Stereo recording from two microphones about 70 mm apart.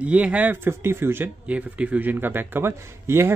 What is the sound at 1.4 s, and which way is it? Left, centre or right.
A man's voice, centre.